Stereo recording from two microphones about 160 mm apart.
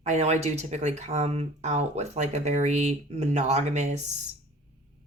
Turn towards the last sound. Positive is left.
turn(degrees=-45)  # may be behind; listen again after turning